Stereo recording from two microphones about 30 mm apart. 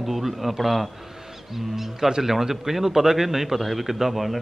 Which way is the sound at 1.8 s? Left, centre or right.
Centre.